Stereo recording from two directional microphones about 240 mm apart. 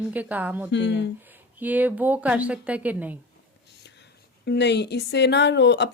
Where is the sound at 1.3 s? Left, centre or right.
Centre.